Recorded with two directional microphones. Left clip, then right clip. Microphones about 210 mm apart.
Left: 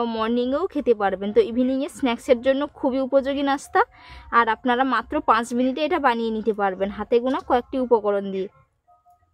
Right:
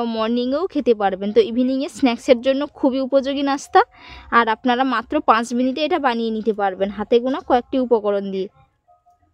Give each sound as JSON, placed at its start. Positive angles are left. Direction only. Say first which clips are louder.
{"t": 0.0, "sound": "a woman's voice", "louder": "right 2 dB", "side_deg": -30}